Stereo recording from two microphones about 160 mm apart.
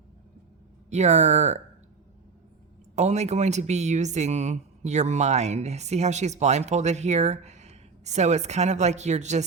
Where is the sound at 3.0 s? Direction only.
45° right (ahead or behind).